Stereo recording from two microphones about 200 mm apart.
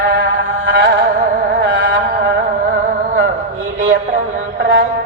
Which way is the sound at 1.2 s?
45° right (ahead or behind).